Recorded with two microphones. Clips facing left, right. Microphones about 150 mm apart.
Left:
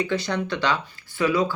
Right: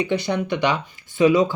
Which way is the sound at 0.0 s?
15° right (ahead or behind).